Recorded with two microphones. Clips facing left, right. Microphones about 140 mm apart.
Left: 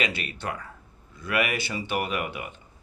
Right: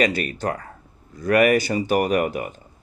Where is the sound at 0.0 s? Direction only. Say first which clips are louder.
Right 9 dB; 45° right (ahead or behind).